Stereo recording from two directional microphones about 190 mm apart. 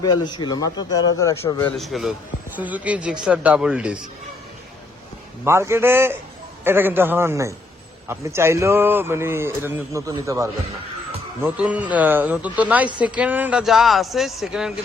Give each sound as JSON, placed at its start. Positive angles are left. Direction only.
{"t": 0.0, "sound": "a man's voice", "side_deg": 20}
{"t": 1.8, "sound": "a man's voice", "side_deg": 0}
{"t": 5.5, "sound": "speech", "side_deg": -15}